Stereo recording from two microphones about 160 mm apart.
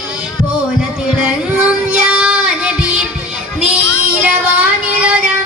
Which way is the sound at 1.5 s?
10° right (ahead or behind).